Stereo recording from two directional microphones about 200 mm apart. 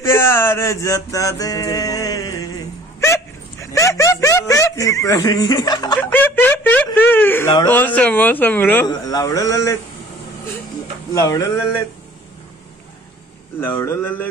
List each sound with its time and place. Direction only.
0.0 s music: 15° left (ahead or behind)
3.6 s speech: 15° left (ahead or behind)
5.9 s a man's voice: 10° left (ahead or behind)
11.1 s a man's voice: 15° left (ahead or behind)
13.6 s a man's voice: 10° left (ahead or behind)